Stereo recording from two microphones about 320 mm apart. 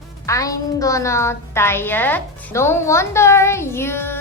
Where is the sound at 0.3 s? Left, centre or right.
Centre.